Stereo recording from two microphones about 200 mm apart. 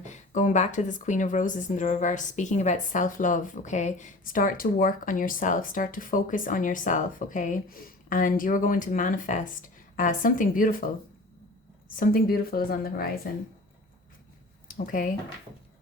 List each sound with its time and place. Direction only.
0.0 s a woman's voice: 35° left (ahead or behind)
11.9 s a woman's voice: 45° left (ahead or behind)
14.7 s speech: 40° left (ahead or behind)